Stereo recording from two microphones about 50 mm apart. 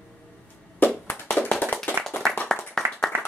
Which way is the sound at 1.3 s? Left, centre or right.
Left.